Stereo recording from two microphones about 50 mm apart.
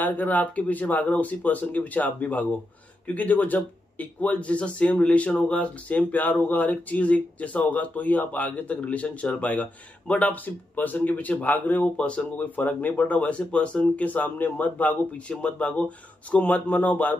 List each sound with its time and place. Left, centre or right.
0.0 s speech: left
12.0 s speech: left
12.4 s speech: left